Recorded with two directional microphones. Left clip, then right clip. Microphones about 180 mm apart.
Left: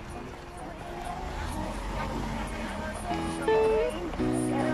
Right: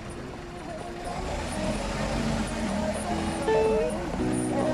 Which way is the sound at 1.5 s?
60° right (ahead or behind).